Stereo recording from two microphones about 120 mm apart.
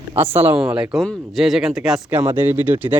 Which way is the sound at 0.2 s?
20° right (ahead or behind).